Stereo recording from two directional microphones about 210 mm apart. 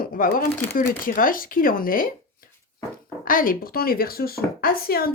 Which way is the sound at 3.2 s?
40° left (ahead or behind).